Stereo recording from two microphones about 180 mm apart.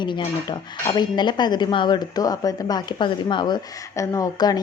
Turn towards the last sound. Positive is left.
turn(degrees=20)  # may be behind; listen again after turning